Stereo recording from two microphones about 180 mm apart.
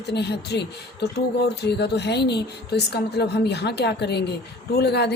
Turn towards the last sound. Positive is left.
turn(degrees=65)  # may be behind; listen again after turning